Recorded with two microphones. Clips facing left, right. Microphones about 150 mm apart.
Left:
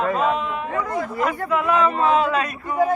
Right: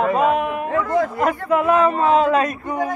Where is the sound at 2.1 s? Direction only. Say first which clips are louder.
Right 4 dB; 45° right (ahead or behind).